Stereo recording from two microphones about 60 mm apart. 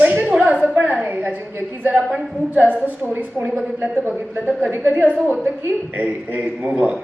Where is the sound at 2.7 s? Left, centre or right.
Right.